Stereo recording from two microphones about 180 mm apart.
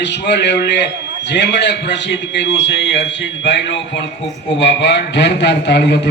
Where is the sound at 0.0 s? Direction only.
75° left (ahead or behind).